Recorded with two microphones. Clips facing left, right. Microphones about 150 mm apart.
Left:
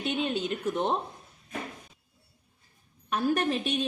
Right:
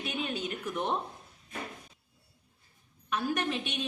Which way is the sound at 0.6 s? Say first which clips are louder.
Left 4 dB; 30° left (ahead or behind).